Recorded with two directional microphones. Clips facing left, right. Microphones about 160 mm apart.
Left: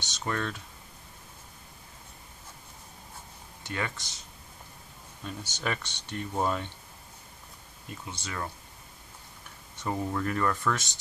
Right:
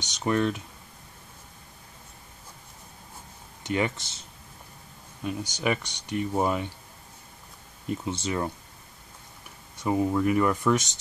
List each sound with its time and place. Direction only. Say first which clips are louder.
0.0 s speech: right 8 dB; 15° right (ahead or behind)
3.6 s speech: right 8 dB; 20° right (ahead or behind)
5.2 s speech: right 6 dB; 10° right (ahead or behind)
8.0 s speech: right 7 dB; 25° right (ahead or behind)
9.8 s speech: right 7 dB; 10° right (ahead or behind)